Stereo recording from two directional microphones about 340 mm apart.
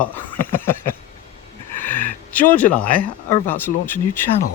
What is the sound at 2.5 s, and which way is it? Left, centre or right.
A man's voice, centre.